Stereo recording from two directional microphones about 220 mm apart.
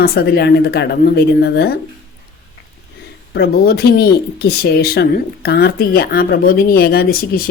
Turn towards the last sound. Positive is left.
turn(degrees=40)  # may be behind; listen again after turning